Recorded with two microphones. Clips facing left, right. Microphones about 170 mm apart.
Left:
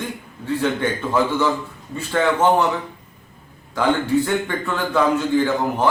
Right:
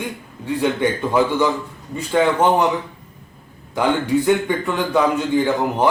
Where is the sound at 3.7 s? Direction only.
15° right (ahead or behind).